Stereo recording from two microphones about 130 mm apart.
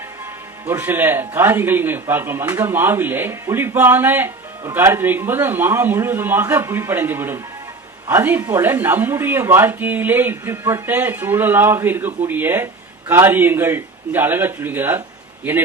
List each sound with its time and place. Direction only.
0.7 s speech: 15° right (ahead or behind)